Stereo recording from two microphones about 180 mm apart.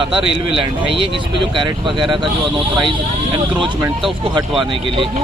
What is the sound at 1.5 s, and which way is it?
Speech, 25° right (ahead or behind).